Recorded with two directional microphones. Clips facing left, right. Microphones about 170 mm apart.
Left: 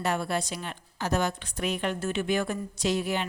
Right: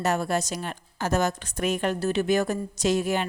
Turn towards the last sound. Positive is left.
turn(degrees=-45)  # may be behind; listen again after turning